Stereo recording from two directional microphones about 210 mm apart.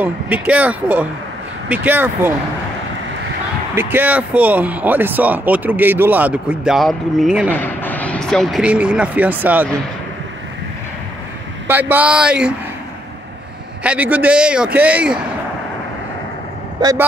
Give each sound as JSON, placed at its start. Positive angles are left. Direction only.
{"t": 0.0, "sound": "speech", "side_deg": -5}
{"t": 3.7, "sound": "speech", "side_deg": -10}
{"t": 11.6, "sound": "speech", "side_deg": -10}
{"t": 13.8, "sound": "speech", "side_deg": -5}
{"t": 16.8, "sound": "speech", "side_deg": -20}